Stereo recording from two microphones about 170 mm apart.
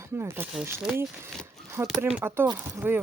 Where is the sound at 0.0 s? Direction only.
15° right (ahead or behind).